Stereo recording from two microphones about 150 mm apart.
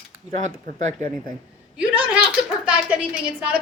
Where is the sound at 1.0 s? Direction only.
20° left (ahead or behind).